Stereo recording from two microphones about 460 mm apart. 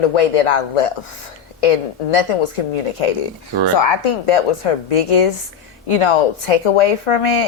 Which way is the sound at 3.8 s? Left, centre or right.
Left.